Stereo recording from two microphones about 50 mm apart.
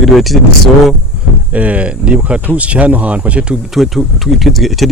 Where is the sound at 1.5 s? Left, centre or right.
Right.